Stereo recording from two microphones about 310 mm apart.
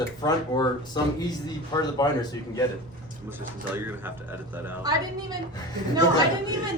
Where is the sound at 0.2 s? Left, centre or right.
Centre.